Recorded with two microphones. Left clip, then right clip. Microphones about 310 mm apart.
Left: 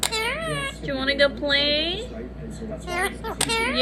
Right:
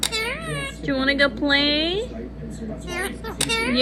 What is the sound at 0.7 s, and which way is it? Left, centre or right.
Speech, centre.